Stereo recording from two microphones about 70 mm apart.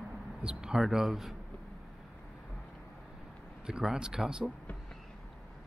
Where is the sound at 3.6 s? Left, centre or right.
Centre.